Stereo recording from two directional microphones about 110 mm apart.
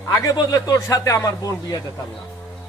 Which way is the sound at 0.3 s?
35° left (ahead or behind).